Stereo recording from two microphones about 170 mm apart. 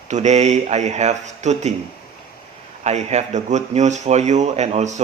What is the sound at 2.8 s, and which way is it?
Speech, 40° right (ahead or behind).